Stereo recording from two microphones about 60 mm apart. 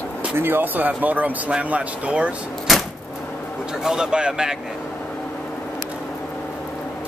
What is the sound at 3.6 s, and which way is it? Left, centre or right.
Speech, centre.